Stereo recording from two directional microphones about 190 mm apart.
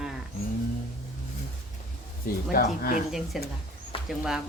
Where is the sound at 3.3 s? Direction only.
Centre (ahead or behind).